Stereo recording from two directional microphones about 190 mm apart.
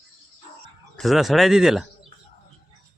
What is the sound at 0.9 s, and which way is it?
Speech, centre (ahead or behind).